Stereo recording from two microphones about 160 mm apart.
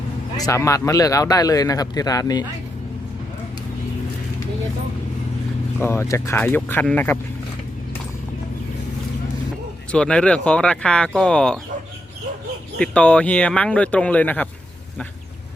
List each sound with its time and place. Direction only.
0.3 s a man's voice: 20° left (ahead or behind)
5.8 s speech: 15° left (ahead or behind)
9.9 s speech: 5° left (ahead or behind)
12.8 s speech: 5° left (ahead or behind)